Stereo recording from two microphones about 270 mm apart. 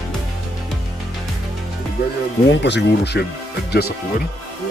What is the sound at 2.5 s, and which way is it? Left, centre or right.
Speech, left.